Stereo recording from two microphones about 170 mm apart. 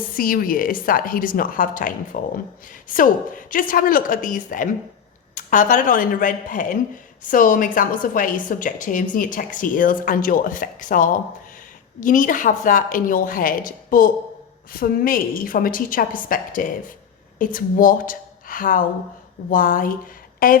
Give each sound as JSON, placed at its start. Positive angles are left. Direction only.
{"t": 0.1, "sound": "a woman's voice", "side_deg": 60}